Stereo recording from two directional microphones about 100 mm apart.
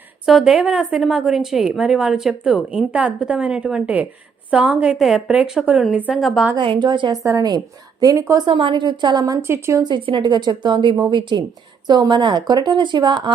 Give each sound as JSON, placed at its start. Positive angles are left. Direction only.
{"t": 0.3, "sound": "a woman's voice", "side_deg": -5}
{"t": 6.6, "sound": "a woman's voice", "side_deg": -55}
{"t": 7.3, "sound": "a woman's voice", "side_deg": -35}
{"t": 8.4, "sound": "a woman's voice", "side_deg": -60}
{"t": 9.8, "sound": "a woman's voice", "side_deg": -50}